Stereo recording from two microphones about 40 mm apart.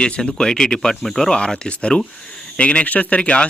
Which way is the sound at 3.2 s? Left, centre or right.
Left.